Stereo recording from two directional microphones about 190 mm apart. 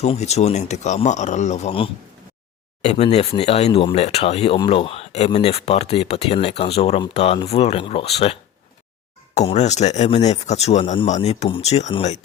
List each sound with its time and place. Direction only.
0.0 s speech: 35° left (ahead or behind)